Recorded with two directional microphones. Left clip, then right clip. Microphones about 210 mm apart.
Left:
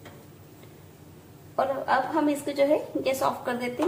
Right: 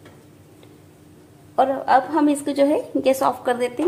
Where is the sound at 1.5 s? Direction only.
50° right (ahead or behind).